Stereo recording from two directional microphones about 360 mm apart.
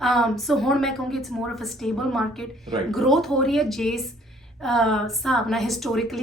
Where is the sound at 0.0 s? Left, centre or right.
Centre.